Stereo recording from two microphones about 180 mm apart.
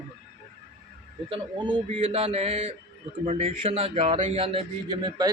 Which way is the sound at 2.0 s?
30° right (ahead or behind).